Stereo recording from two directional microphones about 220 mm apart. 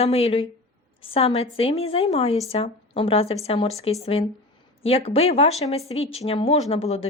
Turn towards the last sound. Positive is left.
turn(degrees=25)  # may be behind; listen again after turning